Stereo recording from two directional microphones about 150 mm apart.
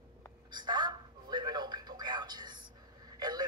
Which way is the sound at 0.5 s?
30° right (ahead or behind).